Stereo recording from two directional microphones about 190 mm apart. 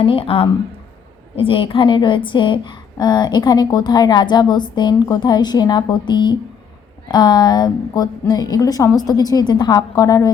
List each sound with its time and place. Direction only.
0.0 s a woman's voice: 30° left (ahead or behind)